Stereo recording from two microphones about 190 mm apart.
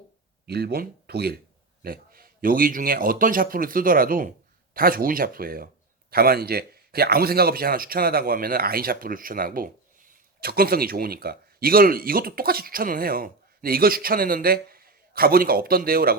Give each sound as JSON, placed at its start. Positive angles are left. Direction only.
{"t": 0.4, "sound": "speech", "side_deg": -60}